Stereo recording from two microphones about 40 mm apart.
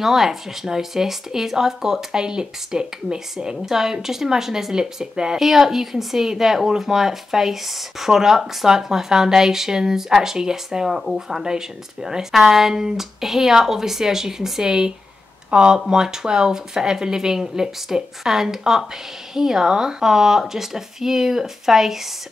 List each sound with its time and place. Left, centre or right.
0.0 s speech: centre
5.4 s speech: centre